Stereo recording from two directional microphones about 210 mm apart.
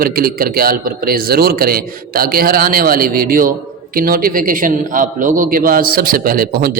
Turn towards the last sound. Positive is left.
turn(degrees=-45)  # may be behind; listen again after turning